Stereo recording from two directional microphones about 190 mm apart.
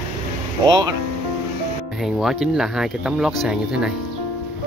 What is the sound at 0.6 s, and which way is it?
Speech, 20° right (ahead or behind).